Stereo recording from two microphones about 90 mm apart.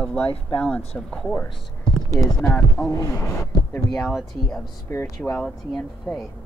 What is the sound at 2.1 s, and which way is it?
Speech, 40° left (ahead or behind).